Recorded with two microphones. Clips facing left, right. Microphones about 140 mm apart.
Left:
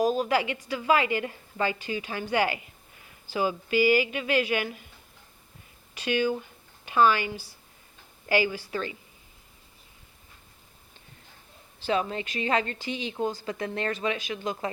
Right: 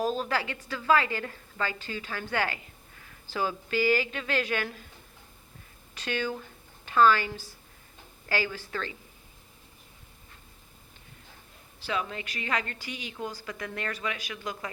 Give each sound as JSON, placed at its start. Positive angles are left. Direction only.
{"t": 0.0, "sound": "a woman's voice", "side_deg": 15}
{"t": 5.9, "sound": "a woman's voice", "side_deg": 10}
{"t": 11.9, "sound": "a woman's voice", "side_deg": 30}